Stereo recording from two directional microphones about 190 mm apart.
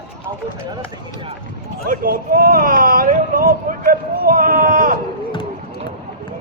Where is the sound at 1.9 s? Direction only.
50° right (ahead or behind).